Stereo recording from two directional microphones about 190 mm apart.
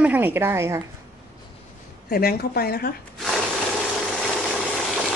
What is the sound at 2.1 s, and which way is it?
Speech, 55° left (ahead or behind).